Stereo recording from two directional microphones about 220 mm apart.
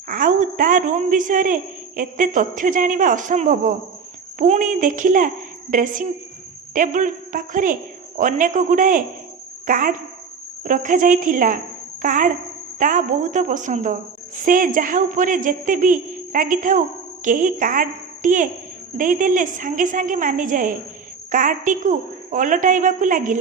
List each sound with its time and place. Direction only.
0.1 s a woman's voice: 35° right (ahead or behind)